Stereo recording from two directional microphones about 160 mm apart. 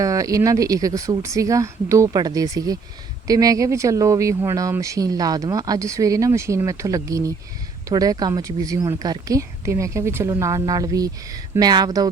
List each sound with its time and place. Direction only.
0.0 s a woman's voice: 20° right (ahead or behind)